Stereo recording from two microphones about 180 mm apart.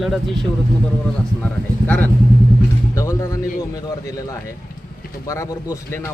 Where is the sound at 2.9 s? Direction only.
15° left (ahead or behind).